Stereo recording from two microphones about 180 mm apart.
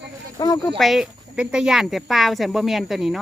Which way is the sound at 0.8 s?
Centre (ahead or behind).